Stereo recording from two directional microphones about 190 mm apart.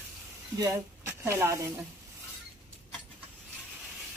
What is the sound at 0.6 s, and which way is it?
Speech, 15° right (ahead or behind).